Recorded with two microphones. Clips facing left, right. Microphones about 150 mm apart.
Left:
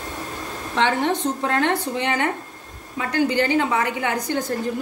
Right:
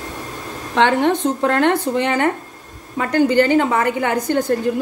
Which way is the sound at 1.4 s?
60° right (ahead or behind).